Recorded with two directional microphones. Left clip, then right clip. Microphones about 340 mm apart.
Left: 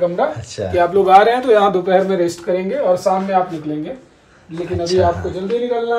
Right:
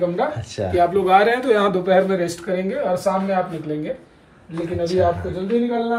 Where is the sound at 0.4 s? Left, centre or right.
Centre.